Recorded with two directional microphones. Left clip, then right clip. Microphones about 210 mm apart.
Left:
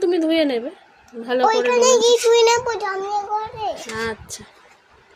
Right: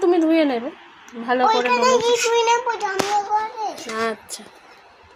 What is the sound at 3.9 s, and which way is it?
Speech, 5° left (ahead or behind).